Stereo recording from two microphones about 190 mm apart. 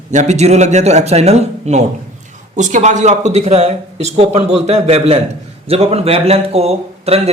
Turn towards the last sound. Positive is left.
turn(degrees=-35)  # may be behind; listen again after turning